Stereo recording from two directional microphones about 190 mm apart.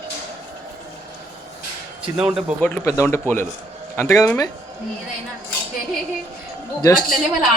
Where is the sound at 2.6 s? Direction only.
10° left (ahead or behind).